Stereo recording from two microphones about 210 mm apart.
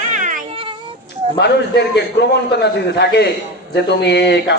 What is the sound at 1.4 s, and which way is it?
A man's voice, 55° left (ahead or behind).